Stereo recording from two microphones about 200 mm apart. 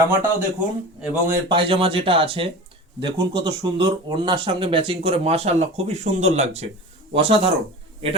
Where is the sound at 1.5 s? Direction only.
25° right (ahead or behind).